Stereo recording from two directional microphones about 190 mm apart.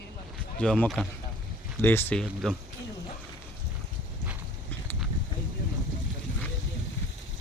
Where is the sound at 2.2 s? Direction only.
5° right (ahead or behind).